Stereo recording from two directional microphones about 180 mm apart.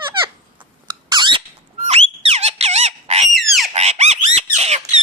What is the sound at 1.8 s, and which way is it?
Squawk, 35° right (ahead or behind).